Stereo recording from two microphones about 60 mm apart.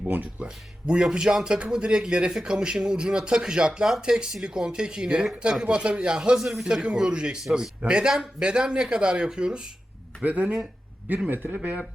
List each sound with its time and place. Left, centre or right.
0.1 s music: right
0.4 s speech: centre
11.3 s speech: right